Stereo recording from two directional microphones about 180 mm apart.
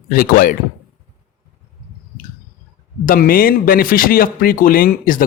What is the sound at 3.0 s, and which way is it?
Speech, 55° left (ahead or behind).